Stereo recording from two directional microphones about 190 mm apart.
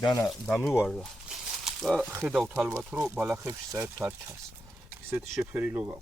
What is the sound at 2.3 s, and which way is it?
Speech, 5° right (ahead or behind).